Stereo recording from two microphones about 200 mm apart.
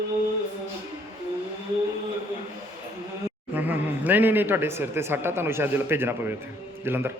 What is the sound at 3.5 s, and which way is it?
A man's voice, 10° right (ahead or behind).